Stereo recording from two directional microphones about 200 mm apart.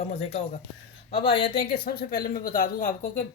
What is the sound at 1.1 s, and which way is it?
Speech, 25° left (ahead or behind).